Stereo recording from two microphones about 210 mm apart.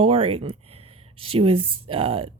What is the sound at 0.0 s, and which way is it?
Speech, 25° right (ahead or behind).